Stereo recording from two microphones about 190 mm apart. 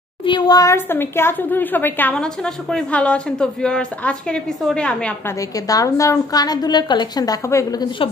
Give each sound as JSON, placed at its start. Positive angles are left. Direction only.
{"t": 0.2, "sound": "speech", "side_deg": 25}
{"t": 5.7, "sound": "a woman's voice", "side_deg": 15}